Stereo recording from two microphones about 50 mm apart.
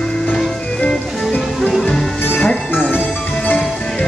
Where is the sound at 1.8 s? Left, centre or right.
Centre.